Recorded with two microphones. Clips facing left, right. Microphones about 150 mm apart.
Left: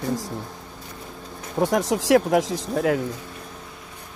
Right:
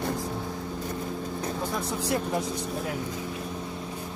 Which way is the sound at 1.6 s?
90° left.